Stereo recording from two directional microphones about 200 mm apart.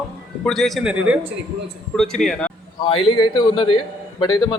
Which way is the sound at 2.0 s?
Centre (ahead or behind).